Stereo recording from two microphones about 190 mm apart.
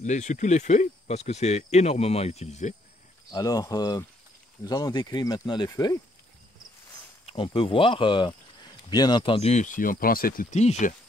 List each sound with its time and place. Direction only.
0.0 s speech: 40° left (ahead or behind)
3.3 s speech: 20° left (ahead or behind)
7.2 s speech: 25° left (ahead or behind)